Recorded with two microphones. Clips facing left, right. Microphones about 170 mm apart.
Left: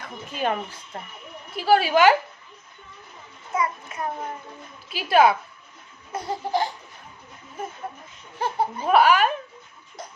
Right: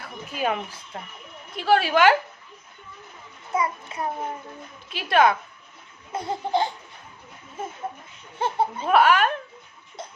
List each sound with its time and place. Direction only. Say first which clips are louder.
0.0 s a woman's voice: even; 10° right (ahead or behind)
3.5 s a sound: even; 30° right (ahead or behind)
4.9 s a woman's voice: left 2 dB; 5° left (ahead or behind)
6.1 s speech: right 1 dB; 25° right (ahead or behind)
8.4 s speech: right 1 dB; 25° right (ahead or behind)
8.9 s a woman's voice: left 1 dB; centre (ahead or behind)
10.0 s a sound: right 1 dB; 25° right (ahead or behind)